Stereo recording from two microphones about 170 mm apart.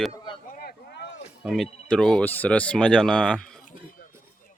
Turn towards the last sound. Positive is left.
turn(degrees=5)  # may be behind; listen again after turning